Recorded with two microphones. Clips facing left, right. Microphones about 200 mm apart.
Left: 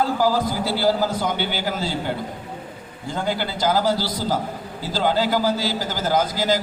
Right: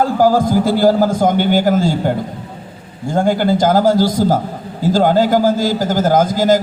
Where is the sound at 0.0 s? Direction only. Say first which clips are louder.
Right 7 dB; 50° right (ahead or behind).